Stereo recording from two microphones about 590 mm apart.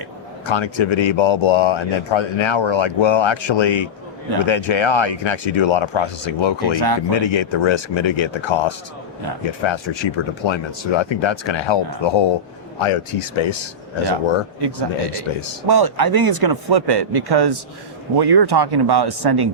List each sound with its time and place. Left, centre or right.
0.4 s speech: left
6.7 s speech: right
7.1 s speech: left
12.8 s speech: left
14.6 s speech: right